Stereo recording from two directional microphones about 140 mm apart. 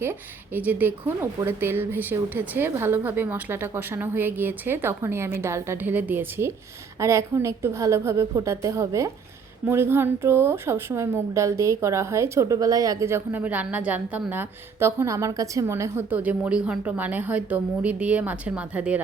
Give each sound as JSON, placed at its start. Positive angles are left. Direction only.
{"t": 0.0, "sound": "a woman's voice", "side_deg": -15}